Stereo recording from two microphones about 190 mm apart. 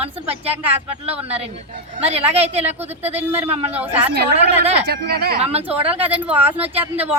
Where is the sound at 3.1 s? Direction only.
10° right (ahead or behind).